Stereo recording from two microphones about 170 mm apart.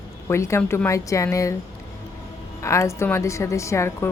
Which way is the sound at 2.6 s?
20° left (ahead or behind).